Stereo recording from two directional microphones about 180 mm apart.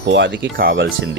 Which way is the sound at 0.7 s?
90° right.